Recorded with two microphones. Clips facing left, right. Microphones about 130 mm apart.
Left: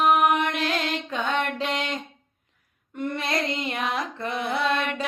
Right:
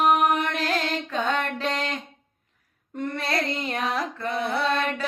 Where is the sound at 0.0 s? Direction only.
40° right (ahead or behind).